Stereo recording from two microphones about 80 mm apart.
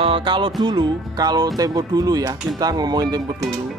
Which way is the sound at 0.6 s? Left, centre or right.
Right.